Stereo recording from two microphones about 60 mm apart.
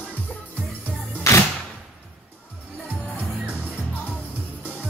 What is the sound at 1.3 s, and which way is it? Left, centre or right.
Music, left.